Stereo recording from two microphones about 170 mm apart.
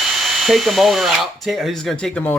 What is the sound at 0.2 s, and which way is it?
Speech, centre (ahead or behind).